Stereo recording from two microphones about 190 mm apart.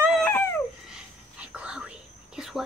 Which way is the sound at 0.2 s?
10° left (ahead or behind).